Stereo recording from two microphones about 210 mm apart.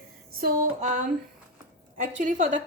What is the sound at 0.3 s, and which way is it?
A woman's voice, 40° right (ahead or behind).